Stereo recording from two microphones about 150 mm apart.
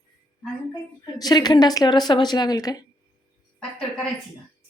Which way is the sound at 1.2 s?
25° left (ahead or behind).